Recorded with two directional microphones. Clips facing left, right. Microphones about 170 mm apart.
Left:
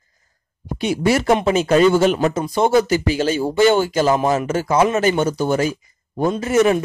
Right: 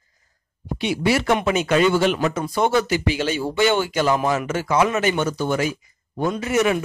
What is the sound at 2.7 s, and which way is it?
Speech, 40° left (ahead or behind).